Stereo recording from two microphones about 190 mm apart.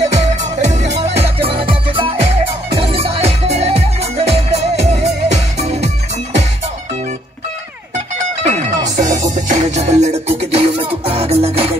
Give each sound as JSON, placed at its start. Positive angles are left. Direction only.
{"t": 0.1, "sound": "music", "side_deg": -40}
{"t": 8.5, "sound": "music", "side_deg": -40}